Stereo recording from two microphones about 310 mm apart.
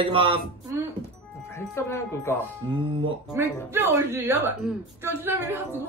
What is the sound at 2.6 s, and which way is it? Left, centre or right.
A woman's voice, centre.